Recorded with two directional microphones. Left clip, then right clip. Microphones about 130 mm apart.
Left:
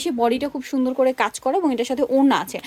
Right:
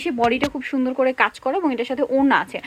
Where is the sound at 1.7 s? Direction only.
70° left (ahead or behind).